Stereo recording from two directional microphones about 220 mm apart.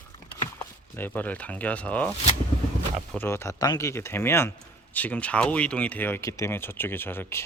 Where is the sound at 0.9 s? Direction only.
10° left (ahead or behind).